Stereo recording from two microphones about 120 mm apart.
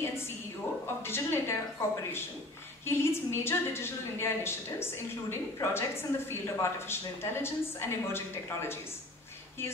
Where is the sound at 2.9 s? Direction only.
20° left (ahead or behind).